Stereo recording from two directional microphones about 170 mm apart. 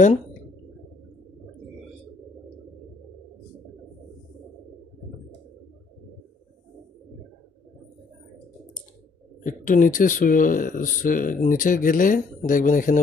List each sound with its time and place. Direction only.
9.4 s speech: 50° left (ahead or behind)